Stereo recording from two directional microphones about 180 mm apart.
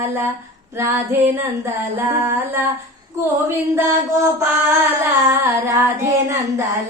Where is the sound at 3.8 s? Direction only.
15° right (ahead or behind).